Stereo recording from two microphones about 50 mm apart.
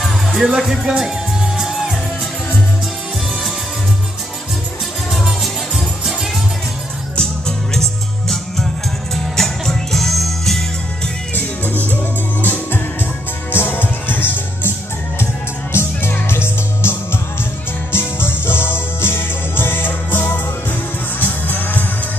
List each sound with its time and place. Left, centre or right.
0.0 s music: centre
5.1 s music: centre
7.2 s music: centre
9.1 s music: centre
11.3 s music: left
15.7 s music: left